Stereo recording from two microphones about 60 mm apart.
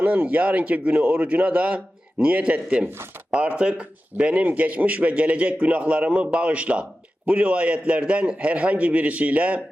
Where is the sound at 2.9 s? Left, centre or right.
Right.